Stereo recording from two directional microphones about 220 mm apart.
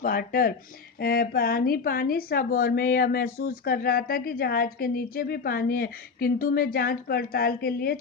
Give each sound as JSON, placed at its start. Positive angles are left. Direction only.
{"t": 0.0, "sound": "speech", "side_deg": 45}